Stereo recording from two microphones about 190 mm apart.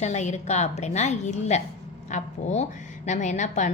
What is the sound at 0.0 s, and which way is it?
A woman's voice, 35° left (ahead or behind).